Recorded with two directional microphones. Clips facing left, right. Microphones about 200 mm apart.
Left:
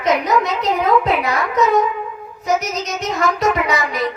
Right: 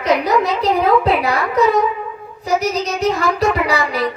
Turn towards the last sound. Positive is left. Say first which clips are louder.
# right 1 dB
turn(degrees=-35)  # may be behind; listen again after turning